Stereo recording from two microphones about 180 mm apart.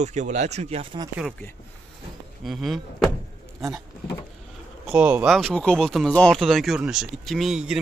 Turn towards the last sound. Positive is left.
turn(degrees=0)  # may be behind; listen again after turning